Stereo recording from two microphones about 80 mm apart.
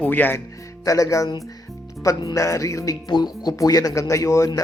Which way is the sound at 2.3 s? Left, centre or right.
Left.